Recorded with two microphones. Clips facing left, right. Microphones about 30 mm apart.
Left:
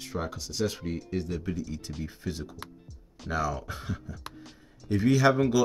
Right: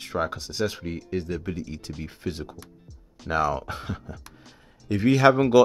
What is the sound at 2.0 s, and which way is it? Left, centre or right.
Speech, right.